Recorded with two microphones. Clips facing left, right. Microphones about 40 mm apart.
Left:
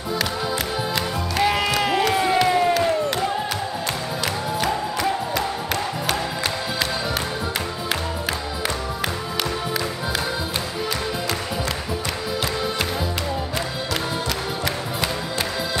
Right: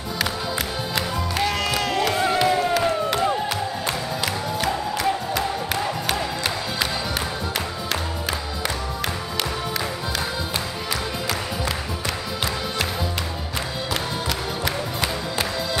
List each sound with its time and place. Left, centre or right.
0.9 s music: centre
2.7 s a sound: centre
4.6 s music: centre